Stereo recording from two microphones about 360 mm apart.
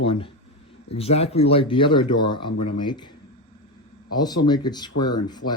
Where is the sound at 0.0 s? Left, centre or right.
Centre.